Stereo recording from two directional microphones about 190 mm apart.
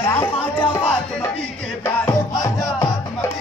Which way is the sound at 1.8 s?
15° left (ahead or behind).